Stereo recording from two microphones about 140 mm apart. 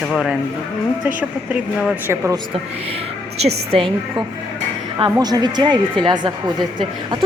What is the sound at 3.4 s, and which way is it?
Speech, 45° right (ahead or behind).